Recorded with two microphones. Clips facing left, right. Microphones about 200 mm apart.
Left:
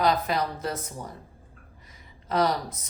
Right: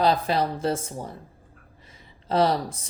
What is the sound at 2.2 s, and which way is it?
Speech, 30° right (ahead or behind).